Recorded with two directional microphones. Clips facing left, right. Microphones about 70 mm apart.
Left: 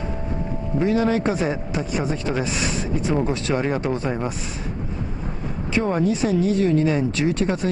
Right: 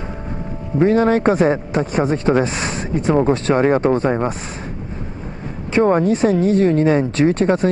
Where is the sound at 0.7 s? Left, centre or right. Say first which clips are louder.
Right 6 dB; right.